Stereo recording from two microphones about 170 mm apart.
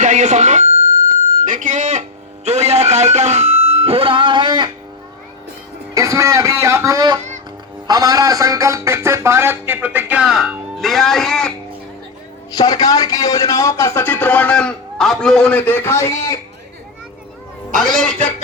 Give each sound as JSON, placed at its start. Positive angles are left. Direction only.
{"t": 0.0, "sound": "a sound", "side_deg": -45}
{"t": 5.9, "sound": "a man's voice", "side_deg": -20}
{"t": 12.5, "sound": "speech", "side_deg": 20}
{"t": 17.7, "sound": "speech", "side_deg": 0}